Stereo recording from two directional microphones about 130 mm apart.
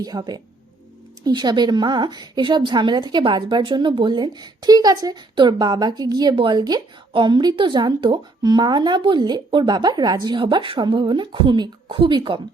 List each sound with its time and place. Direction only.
0.0 s a woman's voice: 30° right (ahead or behind)